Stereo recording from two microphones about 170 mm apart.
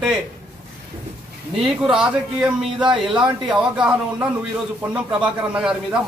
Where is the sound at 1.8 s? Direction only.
5° right (ahead or behind).